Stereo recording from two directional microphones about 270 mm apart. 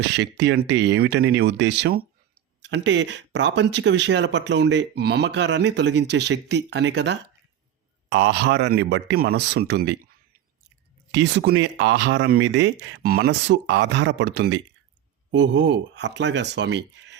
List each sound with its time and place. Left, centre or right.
0.0 s speech: right
11.1 s speech: right